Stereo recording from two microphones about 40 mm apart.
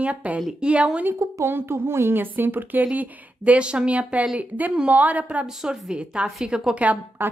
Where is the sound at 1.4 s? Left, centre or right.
Right.